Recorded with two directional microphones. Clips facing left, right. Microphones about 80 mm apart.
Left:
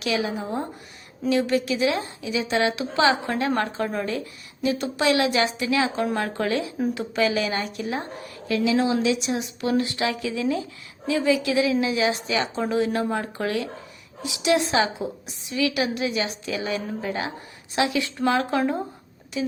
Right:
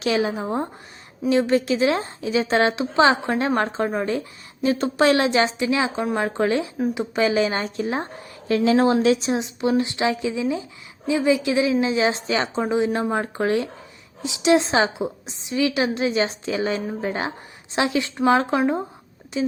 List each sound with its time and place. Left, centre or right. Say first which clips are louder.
0.0 s a woman's voice: right 4 dB; right